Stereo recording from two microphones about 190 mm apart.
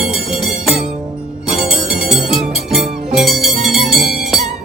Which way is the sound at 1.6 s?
Centre (ahead or behind).